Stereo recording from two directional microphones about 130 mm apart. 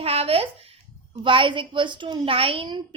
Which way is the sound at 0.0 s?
50° right (ahead or behind).